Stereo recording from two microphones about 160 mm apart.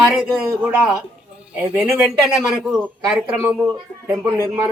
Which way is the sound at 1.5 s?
10° right (ahead or behind).